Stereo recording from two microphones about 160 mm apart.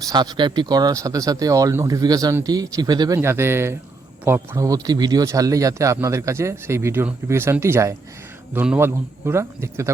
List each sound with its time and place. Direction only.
0.0 s speech: 25° right (ahead or behind)